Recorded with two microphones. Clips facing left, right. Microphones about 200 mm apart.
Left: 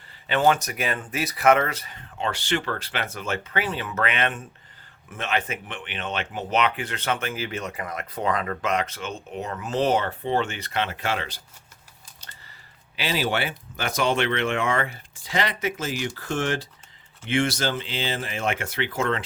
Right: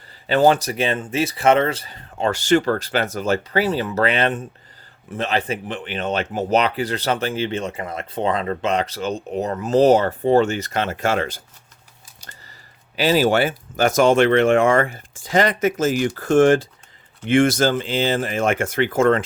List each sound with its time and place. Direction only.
0.3 s speech: 35° right (ahead or behind)
12.2 s a sound: 10° right (ahead or behind)
13.0 s speech: 40° right (ahead or behind)